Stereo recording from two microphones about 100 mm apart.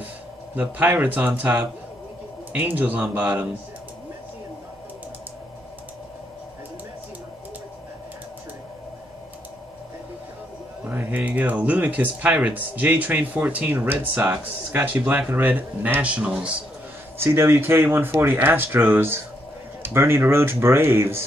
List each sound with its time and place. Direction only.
0.6 s speech: 20° right (ahead or behind)
2.5 s speech: 15° right (ahead or behind)
10.8 s speech: 15° right (ahead or behind)
15.0 s speech: 15° right (ahead or behind)
17.2 s speech: 25° right (ahead or behind)